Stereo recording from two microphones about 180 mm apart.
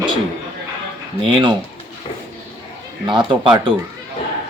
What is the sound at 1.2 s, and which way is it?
Speech, 30° right (ahead or behind).